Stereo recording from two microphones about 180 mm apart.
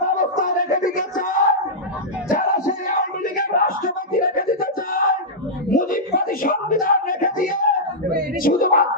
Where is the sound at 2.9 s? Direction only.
50° left (ahead or behind).